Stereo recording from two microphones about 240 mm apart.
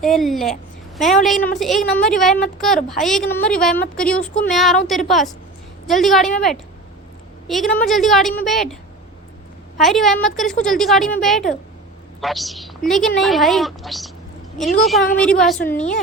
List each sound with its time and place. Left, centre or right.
0.0 s a woman's voice: centre